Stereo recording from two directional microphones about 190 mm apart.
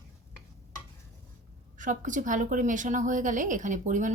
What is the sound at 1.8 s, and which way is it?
A woman's voice, 40° right (ahead or behind).